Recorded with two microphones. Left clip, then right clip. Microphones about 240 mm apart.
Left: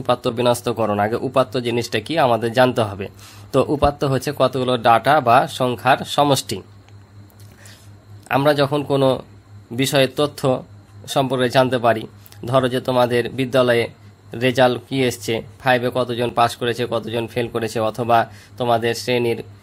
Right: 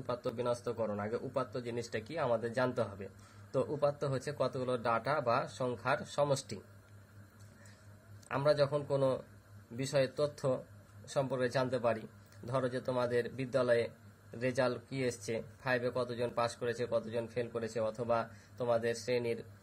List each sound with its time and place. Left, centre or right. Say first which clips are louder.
0.0 s speech: left 18 dB; left
8.3 s speech: left 14 dB; left
9.8 s speech: left 15 dB; left